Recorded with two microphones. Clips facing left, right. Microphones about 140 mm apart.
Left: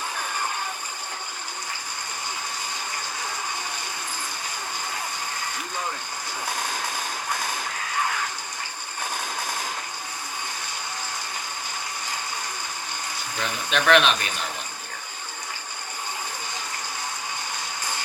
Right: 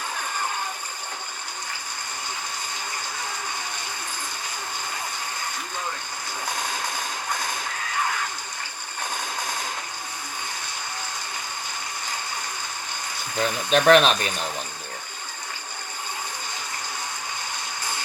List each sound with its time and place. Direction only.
13.4 s speech: 40° right (ahead or behind)